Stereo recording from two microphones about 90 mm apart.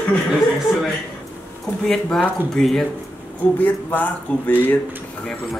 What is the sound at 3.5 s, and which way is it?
Speech, 20° left (ahead or behind).